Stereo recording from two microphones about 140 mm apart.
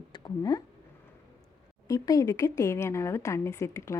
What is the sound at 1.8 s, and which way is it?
Speech, 25° left (ahead or behind).